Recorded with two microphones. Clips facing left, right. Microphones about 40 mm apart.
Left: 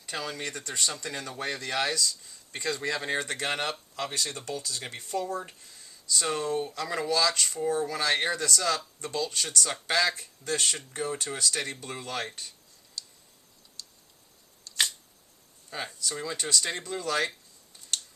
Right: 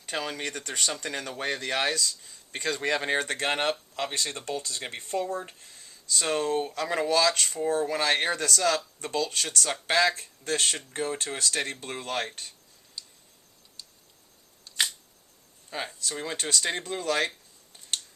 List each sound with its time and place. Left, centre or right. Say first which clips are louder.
0.0 s speech: right 2 dB; right
9.8 s speech: right 3 dB; right
10.2 s speech: right 2 dB; right
13.0 s tick: left 1 dB; right
13.8 s a sound: left 1 dB; right
16.0 s speech: left 1 dB; right